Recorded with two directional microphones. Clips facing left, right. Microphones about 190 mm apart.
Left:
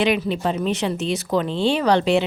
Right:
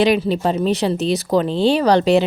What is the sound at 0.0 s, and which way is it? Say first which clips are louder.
Speech: right 4 dB; 35° right (ahead or behind).